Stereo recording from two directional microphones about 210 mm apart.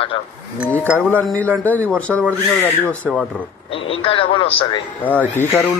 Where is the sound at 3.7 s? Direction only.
25° left (ahead or behind).